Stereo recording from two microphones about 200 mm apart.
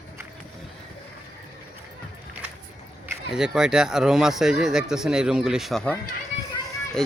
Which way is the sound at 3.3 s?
Centre (ahead or behind).